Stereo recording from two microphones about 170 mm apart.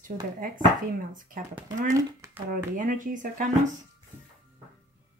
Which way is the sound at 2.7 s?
50° right (ahead or behind).